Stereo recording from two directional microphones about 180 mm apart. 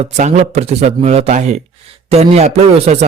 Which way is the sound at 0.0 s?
40° right (ahead or behind).